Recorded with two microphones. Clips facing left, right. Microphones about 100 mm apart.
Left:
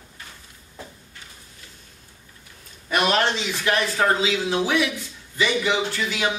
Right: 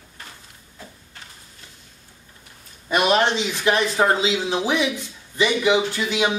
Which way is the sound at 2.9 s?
15° right (ahead or behind).